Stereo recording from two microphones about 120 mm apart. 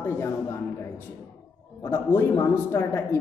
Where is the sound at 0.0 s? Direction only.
20° left (ahead or behind).